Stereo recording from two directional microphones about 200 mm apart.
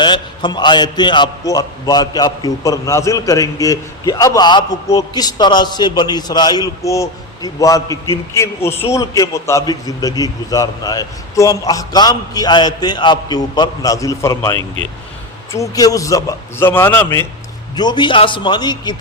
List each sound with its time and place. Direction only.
0.0 s a man's voice: 20° left (ahead or behind)